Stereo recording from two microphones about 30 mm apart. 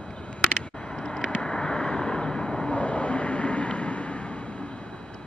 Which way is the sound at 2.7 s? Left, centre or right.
Left.